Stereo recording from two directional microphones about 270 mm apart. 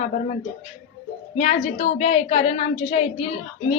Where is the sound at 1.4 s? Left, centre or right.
Left.